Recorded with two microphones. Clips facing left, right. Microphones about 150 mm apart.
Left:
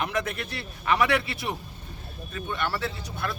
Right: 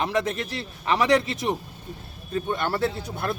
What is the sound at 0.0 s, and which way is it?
A man's voice, 30° right (ahead or behind).